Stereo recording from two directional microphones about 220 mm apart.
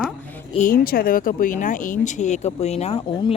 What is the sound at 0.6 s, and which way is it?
Speech, 40° left (ahead or behind).